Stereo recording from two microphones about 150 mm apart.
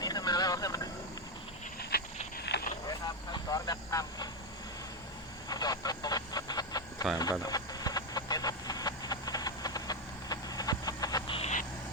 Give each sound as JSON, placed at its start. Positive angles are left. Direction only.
{"t": 0.0, "sound": "vehicle", "side_deg": 25}
{"t": 1.9, "sound": "a sound", "side_deg": 90}
{"t": 3.3, "sound": "vehicle", "side_deg": 25}
{"t": 5.5, "sound": "vehicle", "side_deg": 25}
{"t": 7.2, "sound": "a sound", "side_deg": 25}
{"t": 11.3, "sound": "vehicle", "side_deg": 50}